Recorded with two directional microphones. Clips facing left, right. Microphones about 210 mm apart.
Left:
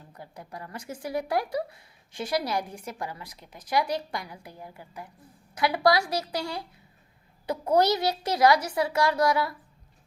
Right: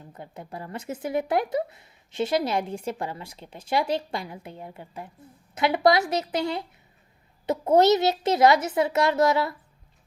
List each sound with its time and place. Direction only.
0.1 s speech: 25° right (ahead or behind)